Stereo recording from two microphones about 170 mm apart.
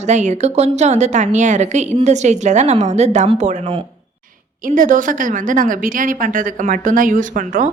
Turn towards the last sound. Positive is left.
turn(degrees=-50)  # may be behind; listen again after turning